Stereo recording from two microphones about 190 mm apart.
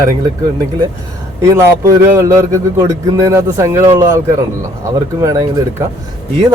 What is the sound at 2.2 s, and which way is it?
A man's voice, 15° right (ahead or behind).